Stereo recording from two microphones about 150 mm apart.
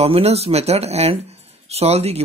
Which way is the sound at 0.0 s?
45° right (ahead or behind).